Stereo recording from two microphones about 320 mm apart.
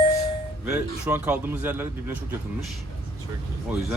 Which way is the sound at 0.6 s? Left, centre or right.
Centre.